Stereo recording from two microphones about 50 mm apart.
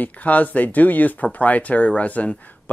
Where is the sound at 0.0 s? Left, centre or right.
Left.